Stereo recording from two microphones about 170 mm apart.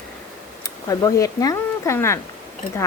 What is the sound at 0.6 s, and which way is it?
Speech, 20° left (ahead or behind).